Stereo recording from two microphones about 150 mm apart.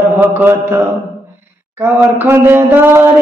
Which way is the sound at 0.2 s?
15° right (ahead or behind).